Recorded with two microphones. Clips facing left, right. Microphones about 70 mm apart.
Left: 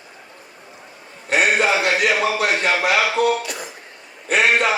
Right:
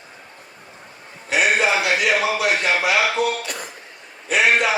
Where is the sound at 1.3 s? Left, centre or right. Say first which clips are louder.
Left 1 dB; left.